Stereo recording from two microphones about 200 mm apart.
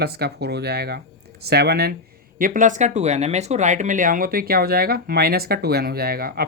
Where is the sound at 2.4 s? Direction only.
40° right (ahead or behind).